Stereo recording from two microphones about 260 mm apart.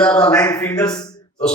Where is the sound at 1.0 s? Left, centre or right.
Centre.